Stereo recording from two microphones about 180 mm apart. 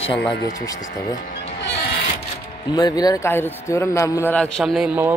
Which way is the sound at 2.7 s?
20° left (ahead or behind).